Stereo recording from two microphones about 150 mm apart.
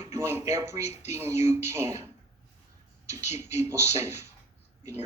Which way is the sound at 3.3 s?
15° right (ahead or behind).